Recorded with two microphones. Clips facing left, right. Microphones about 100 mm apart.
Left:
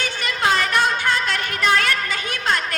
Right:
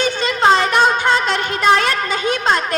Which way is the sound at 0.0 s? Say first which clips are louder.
Right 7 dB; 25° right (ahead or behind).